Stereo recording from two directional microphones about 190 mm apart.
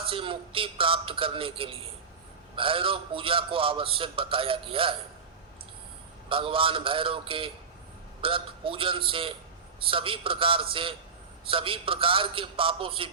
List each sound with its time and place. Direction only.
0.1 s a man's voice: 30° right (ahead or behind)
6.2 s a man's voice: 25° right (ahead or behind)